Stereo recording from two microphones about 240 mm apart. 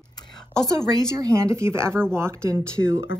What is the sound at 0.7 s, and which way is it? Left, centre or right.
Speech, centre.